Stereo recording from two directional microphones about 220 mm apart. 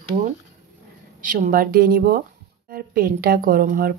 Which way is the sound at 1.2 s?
35° right (ahead or behind).